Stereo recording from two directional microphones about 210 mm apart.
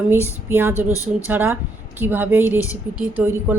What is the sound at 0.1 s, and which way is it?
Speech, 10° right (ahead or behind).